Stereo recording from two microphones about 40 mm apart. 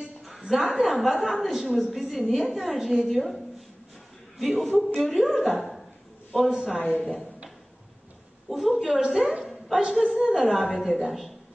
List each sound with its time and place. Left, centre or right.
0.2 s a woman's voice: centre
4.4 s a woman's voice: centre
6.5 s a woman's voice: centre
8.5 s a woman's voice: centre